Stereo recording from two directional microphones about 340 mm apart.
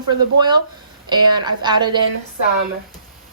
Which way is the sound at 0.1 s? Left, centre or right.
Centre.